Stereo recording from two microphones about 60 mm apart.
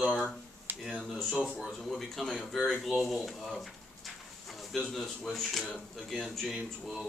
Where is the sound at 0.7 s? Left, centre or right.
Right.